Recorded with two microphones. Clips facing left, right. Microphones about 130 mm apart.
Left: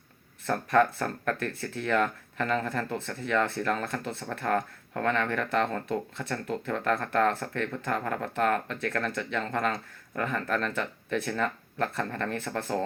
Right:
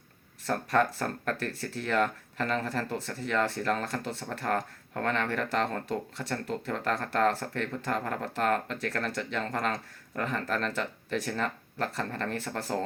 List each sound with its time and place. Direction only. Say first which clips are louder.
0.4 s speech: left 3 dB; 35° right (ahead or behind)